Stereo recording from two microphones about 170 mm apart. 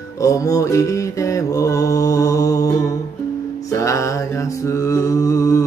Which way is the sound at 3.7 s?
20° left (ahead or behind).